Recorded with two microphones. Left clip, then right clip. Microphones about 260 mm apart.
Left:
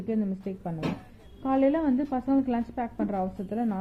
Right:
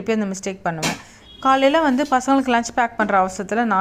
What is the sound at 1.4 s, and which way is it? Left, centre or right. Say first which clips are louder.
A woman's voice: right 10 dB; centre.